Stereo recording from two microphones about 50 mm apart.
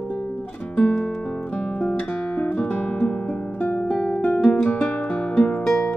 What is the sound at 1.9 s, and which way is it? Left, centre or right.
Guitar, left.